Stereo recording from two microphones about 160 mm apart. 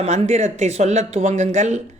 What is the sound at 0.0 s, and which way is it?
A man's voice, 40° right (ahead or behind).